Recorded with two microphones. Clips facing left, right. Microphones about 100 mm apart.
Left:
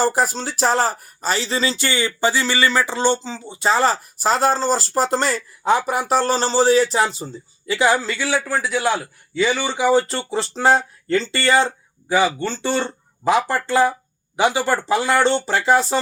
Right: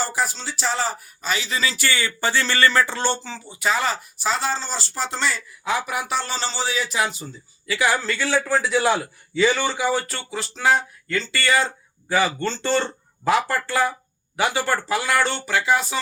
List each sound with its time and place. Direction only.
0.0 s speech: 45° left (ahead or behind); by 8.4 s 15° left (ahead or behind)
8.4 s a man's voice: centre (ahead or behind); by 16.0 s 35° left (ahead or behind)